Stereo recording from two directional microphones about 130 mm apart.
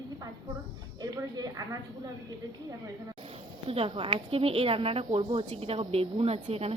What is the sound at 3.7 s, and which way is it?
A woman's voice, 45° right (ahead or behind).